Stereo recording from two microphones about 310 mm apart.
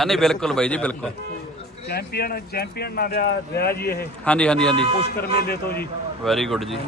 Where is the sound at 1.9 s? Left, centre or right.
Left.